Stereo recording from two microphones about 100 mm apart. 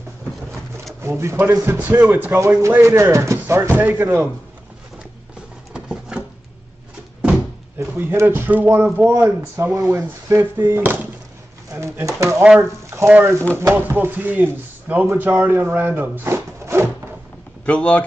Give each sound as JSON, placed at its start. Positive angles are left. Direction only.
{"t": 1.0, "sound": "speech", "side_deg": -25}
{"t": 5.7, "sound": "a sound", "side_deg": -10}
{"t": 7.9, "sound": "speech", "side_deg": -20}
{"t": 9.8, "sound": "speech", "side_deg": -30}
{"t": 17.6, "sound": "speech", "side_deg": 10}